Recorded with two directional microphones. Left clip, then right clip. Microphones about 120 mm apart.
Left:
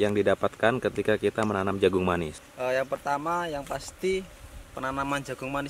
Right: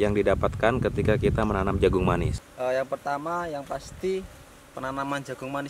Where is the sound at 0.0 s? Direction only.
25° right (ahead or behind).